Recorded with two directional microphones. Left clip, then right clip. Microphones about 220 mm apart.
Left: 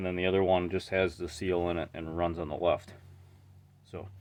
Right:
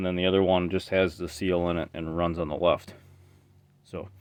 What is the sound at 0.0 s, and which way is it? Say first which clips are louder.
Speech: right 4 dB; 45° right (ahead or behind).